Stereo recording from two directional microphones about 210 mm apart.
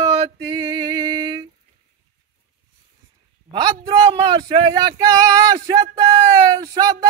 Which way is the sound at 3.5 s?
20° right (ahead or behind).